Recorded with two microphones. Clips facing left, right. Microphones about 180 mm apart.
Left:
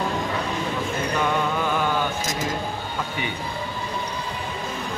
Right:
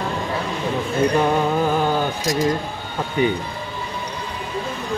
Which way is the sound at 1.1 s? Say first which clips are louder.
Right 2 dB; 40° right (ahead or behind).